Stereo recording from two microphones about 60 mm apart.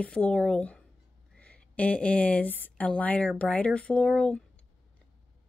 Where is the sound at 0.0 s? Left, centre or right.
Centre.